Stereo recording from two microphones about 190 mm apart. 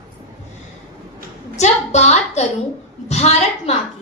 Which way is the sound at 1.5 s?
35° left (ahead or behind).